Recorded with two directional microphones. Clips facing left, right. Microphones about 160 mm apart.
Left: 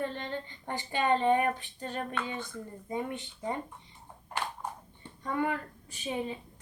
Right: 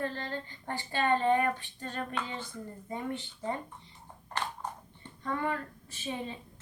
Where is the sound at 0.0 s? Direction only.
20° left (ahead or behind).